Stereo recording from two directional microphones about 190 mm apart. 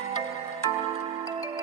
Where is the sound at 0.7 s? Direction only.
30° right (ahead or behind).